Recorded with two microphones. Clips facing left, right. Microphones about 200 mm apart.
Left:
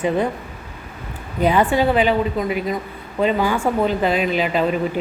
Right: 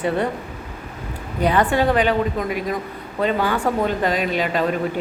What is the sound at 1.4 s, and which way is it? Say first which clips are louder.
Speech: left 1 dB; 10° left (ahead or behind).